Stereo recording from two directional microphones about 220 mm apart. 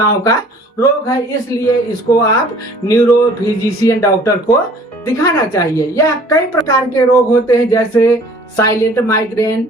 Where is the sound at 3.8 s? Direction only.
15° left (ahead or behind).